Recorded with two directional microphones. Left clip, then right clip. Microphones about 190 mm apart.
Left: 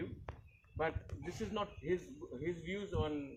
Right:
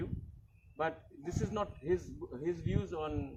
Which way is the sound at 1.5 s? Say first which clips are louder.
Right 3 dB; 15° right (ahead or behind).